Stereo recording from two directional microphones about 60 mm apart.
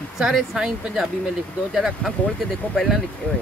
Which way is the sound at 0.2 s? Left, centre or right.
Centre.